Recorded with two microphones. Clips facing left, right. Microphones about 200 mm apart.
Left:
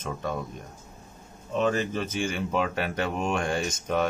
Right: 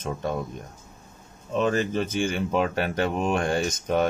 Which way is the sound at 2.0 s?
40° right (ahead or behind).